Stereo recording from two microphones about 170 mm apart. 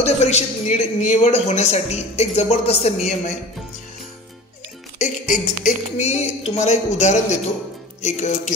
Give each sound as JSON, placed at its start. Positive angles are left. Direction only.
{"t": 0.0, "sound": "a man's voice", "side_deg": 40}
{"t": 4.9, "sound": "speech", "side_deg": 45}